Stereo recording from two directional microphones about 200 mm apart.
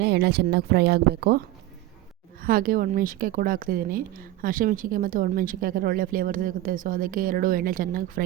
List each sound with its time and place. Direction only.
0.0 s speech: 55° right (ahead or behind)
2.4 s a woman's voice: 45° right (ahead or behind)